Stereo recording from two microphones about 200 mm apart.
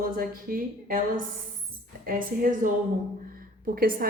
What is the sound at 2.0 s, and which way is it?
Speech, 45° right (ahead or behind).